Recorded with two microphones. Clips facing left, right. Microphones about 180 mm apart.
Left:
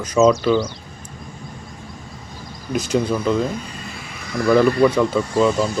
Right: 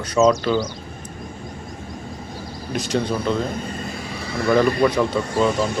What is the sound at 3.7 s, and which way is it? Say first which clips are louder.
Vehicle: right 5 dB; 45° right (ahead or behind).